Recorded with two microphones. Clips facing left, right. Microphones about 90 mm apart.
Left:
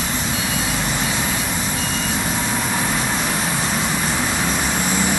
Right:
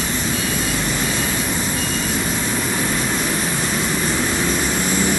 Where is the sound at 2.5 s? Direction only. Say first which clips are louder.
Even; 25° left (ahead or behind).